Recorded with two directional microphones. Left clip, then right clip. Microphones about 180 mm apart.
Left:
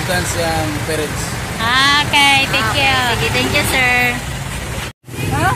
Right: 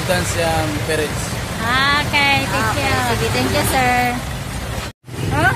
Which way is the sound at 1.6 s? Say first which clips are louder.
Left 4 dB; 10° right (ahead or behind).